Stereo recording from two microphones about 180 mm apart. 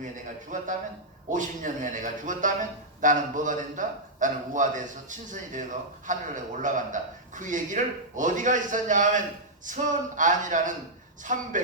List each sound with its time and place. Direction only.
0.5 s a man's voice: 45° right (ahead or behind)